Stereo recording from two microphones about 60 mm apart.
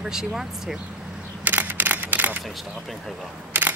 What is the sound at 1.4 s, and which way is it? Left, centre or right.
Single-lens reflex camera, right.